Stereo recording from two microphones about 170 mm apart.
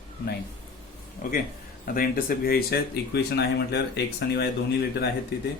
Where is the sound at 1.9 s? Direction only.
60° left (ahead or behind); by 5.1 s 75° left (ahead or behind).